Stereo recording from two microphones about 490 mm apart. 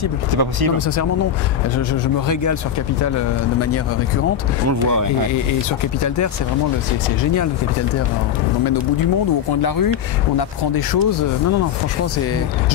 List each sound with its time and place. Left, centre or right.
0.3 s speech: right
0.7 s a man's voice: left
4.6 s speech: right
6.0 s a man's voice: left
9.6 s speech: left